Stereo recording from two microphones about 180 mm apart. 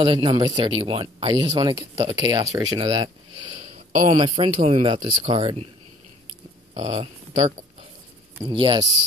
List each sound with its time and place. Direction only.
0.0 s speech: 25° right (ahead or behind)
3.9 s speech: 40° right (ahead or behind)
4.2 s speech: 30° right (ahead or behind)
6.7 s speech: 30° right (ahead or behind)
8.5 s speech: 25° right (ahead or behind)